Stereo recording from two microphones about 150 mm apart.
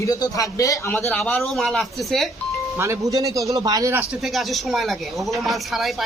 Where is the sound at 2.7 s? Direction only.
20° right (ahead or behind).